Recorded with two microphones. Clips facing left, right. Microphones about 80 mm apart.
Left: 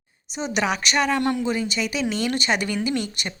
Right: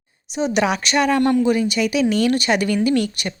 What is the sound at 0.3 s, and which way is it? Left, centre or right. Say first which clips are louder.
A woman's voice: right 5 dB; centre.